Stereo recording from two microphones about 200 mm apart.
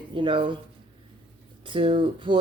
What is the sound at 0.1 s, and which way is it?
Speech, 25° right (ahead or behind).